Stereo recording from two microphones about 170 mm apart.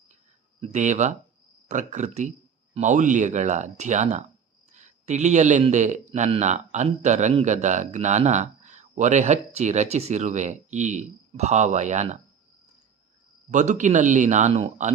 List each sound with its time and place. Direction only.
0.6 s a man's voice: 45° right (ahead or behind)
13.5 s a man's voice: 45° right (ahead or behind)